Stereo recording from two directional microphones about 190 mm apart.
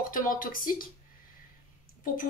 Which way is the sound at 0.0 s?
45° left (ahead or behind).